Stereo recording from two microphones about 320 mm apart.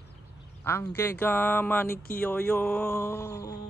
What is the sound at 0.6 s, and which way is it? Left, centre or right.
A man's voice, centre.